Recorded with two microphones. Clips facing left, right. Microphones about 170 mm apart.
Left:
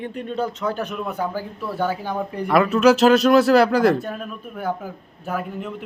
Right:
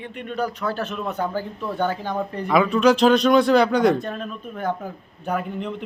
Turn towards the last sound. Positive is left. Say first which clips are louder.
# right 1 dB
turn(degrees=5)  # may be behind; listen again after turning